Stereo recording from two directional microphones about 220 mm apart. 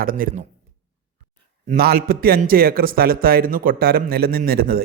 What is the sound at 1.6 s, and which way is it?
A man's voice, 45° right (ahead or behind).